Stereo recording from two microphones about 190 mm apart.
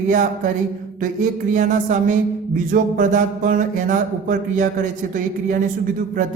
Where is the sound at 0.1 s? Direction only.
40° right (ahead or behind).